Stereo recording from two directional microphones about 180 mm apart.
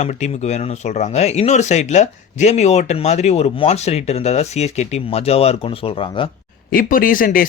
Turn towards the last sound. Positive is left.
turn(degrees=50)  # may be behind; listen again after turning